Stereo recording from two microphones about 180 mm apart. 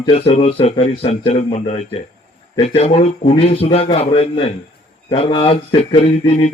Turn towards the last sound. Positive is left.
turn(degrees=35)  # may be behind; listen again after turning